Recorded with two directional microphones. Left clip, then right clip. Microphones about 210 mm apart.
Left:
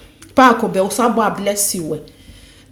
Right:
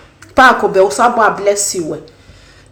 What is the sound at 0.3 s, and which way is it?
Speech, 35° left (ahead or behind).